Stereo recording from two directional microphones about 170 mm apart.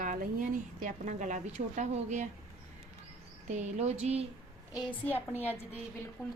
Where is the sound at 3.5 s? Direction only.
40° right (ahead or behind).